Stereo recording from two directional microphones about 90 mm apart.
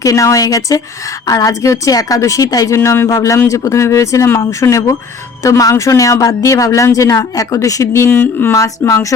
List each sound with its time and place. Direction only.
0.0 s speech: 40° left (ahead or behind)
8.5 s speech: 35° left (ahead or behind)